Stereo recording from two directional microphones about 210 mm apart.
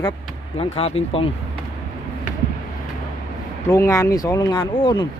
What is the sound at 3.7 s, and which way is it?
Speech, 15° left (ahead or behind).